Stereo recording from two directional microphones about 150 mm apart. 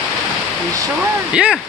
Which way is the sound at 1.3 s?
5° right (ahead or behind).